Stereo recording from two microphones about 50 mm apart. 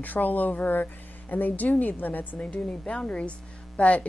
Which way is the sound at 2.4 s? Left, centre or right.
Left.